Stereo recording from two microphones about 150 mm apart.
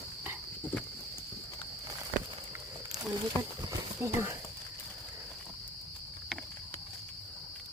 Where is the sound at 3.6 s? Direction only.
20° right (ahead or behind).